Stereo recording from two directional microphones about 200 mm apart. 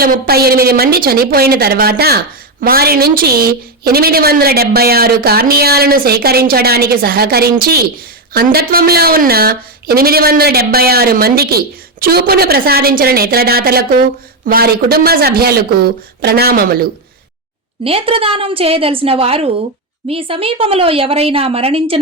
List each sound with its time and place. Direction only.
0.0 s speech: 50° right (ahead or behind)
17.8 s a woman's voice: 30° right (ahead or behind)